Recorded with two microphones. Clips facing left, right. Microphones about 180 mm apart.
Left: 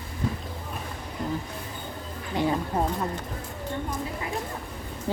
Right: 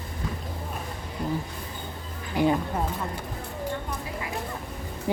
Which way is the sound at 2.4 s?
25° left (ahead or behind).